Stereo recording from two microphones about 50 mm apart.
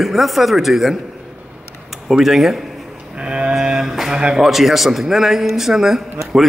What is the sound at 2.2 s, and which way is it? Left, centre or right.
Speech, centre.